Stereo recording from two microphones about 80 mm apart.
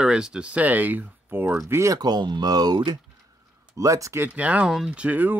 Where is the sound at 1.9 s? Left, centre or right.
Right.